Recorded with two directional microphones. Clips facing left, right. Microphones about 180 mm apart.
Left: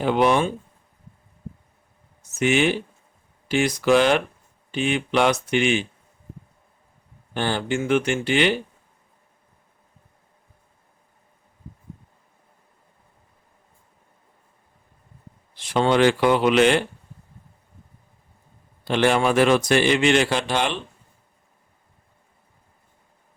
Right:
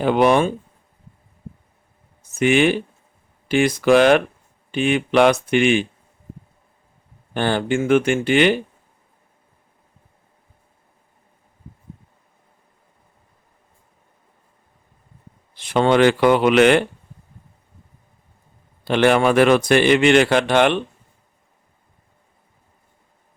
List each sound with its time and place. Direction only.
0.0 s speech: 55° right (ahead or behind)
2.3 s speech: 55° right (ahead or behind)
7.3 s speech: 55° right (ahead or behind)
15.5 s speech: 55° right (ahead or behind)
18.9 s speech: 60° right (ahead or behind)